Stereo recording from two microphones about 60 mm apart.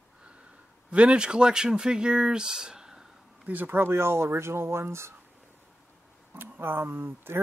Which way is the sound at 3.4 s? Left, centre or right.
Right.